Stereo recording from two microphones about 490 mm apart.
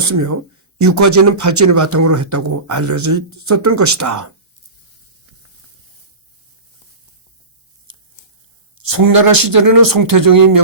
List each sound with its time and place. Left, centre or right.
0.8 s speech: right
7.9 s tearing: right
8.8 s speech: right